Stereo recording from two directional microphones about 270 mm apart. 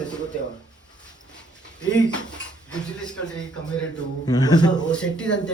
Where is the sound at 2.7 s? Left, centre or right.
Centre.